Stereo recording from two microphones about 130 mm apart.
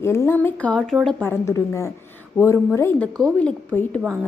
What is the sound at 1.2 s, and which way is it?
A woman's voice, 20° left (ahead or behind).